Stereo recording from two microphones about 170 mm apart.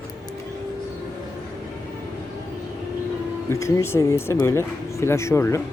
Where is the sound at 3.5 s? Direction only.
15° left (ahead or behind).